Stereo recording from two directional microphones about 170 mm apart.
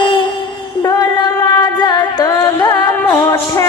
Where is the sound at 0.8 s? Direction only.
20° left (ahead or behind).